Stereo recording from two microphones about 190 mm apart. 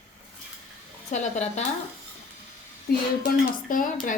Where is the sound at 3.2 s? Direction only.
45° left (ahead or behind).